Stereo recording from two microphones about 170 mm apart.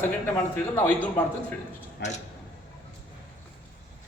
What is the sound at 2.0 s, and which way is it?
Speech, 45° left (ahead or behind).